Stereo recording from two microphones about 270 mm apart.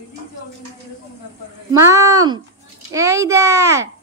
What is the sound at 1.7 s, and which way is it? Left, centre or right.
A woman's voice, centre.